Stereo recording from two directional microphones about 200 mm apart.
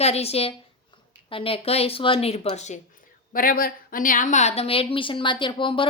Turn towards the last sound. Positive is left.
turn(degrees=25)  # may be behind; listen again after turning